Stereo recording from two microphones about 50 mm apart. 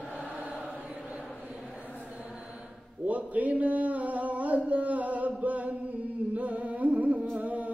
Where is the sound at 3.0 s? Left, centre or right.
Right.